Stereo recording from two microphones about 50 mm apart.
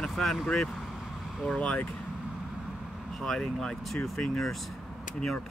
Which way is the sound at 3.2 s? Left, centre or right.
Centre.